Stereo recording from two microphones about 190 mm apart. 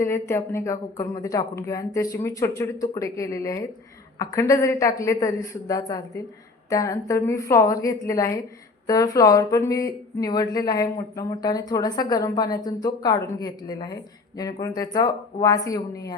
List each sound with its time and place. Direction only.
0.0 s speech: 15° left (ahead or behind)